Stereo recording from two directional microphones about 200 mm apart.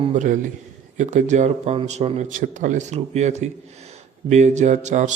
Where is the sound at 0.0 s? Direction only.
40° right (ahead or behind).